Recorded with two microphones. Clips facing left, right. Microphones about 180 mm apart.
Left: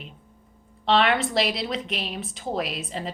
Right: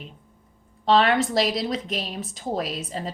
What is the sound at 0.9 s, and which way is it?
A woman's voice, 40° right (ahead or behind).